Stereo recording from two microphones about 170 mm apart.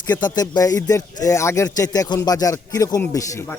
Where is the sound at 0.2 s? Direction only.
25° left (ahead or behind).